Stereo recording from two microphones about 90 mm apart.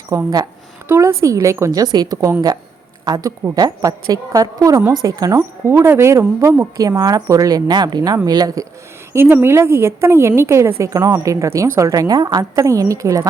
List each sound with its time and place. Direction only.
0.1 s a woman's voice: 45° right (ahead or behind)
0.9 s speech: 30° right (ahead or behind)
9.1 s speech: 25° right (ahead or behind)